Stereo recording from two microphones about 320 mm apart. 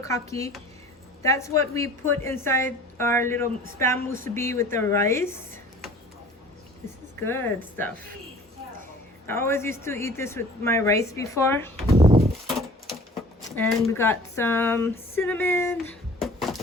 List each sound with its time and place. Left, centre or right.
0.0 s speech: centre
7.3 s speech: centre
9.2 s speech: centre
11.9 s bird: centre
12.5 s a sound: centre
13.6 s speech: centre
16.2 s a sound: centre